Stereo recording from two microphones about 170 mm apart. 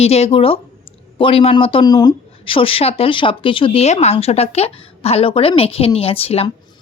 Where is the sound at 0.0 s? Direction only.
35° left (ahead or behind).